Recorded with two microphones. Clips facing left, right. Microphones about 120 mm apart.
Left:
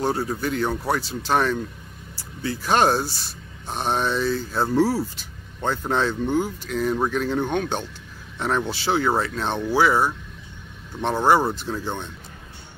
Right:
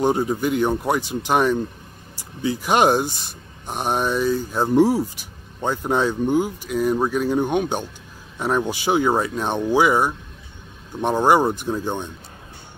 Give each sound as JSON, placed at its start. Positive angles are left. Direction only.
{"t": 0.0, "sound": "speech", "side_deg": -15}